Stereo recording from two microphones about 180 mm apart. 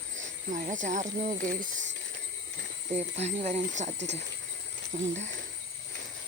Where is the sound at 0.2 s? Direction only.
45° right (ahead or behind).